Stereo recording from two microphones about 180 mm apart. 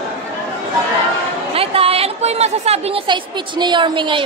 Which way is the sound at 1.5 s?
30° right (ahead or behind).